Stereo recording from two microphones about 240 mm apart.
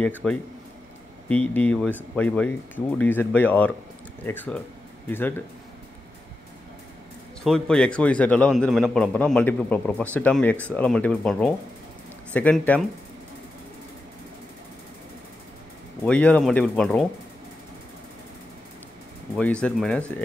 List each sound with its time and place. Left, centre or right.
0.1 s a man's voice: centre
7.4 s a man's voice: centre
16.1 s a man's voice: centre
19.3 s a man's voice: centre